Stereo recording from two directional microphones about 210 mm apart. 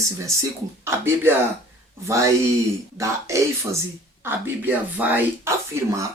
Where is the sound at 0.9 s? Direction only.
10° right (ahead or behind).